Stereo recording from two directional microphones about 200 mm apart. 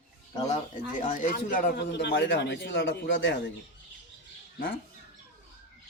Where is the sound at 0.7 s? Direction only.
45° left (ahead or behind); by 3.3 s 65° left (ahead or behind).